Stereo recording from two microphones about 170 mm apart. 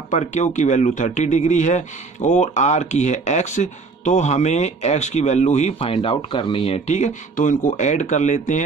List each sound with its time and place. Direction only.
0.1 s a man's voice: 45° left (ahead or behind)